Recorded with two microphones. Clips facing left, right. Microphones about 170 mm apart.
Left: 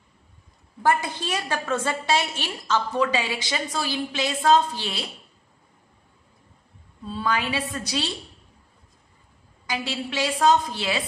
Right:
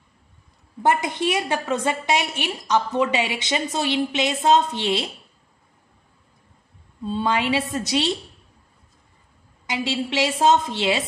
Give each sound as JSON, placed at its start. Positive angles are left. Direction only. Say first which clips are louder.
{"t": 0.8, "sound": "a woman's voice", "louder": "right 3 dB", "side_deg": -20}
{"t": 7.1, "sound": "a woman's voice", "louder": "right 4 dB", "side_deg": -25}
{"t": 9.7, "sound": "a woman's voice", "louder": "right 4 dB", "side_deg": -25}